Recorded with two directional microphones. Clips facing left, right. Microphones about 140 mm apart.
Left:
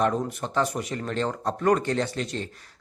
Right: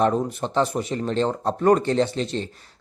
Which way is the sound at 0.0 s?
30° right (ahead or behind).